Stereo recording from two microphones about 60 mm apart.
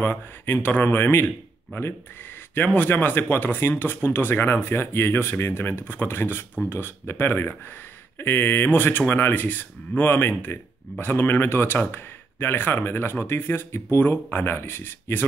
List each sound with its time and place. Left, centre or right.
0.0 s speech: left